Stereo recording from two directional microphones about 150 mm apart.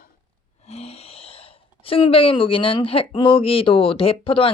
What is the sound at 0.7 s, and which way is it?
Speech, 45° left (ahead or behind).